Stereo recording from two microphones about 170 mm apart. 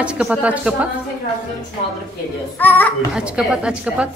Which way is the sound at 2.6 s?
10° left (ahead or behind).